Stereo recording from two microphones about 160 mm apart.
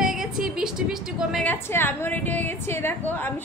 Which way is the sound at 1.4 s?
15° left (ahead or behind).